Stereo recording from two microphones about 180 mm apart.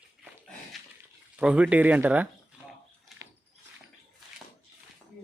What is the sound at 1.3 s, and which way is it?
Speech, 5° right (ahead or behind).